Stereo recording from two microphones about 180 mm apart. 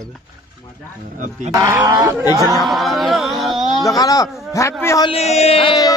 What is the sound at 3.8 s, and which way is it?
Speech, 20° left (ahead or behind).